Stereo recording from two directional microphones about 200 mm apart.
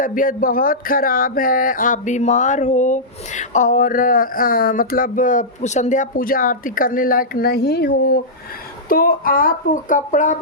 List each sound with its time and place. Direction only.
0.0 s speech: 40° left (ahead or behind)